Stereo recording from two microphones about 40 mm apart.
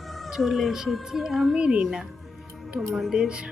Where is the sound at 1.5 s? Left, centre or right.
Right.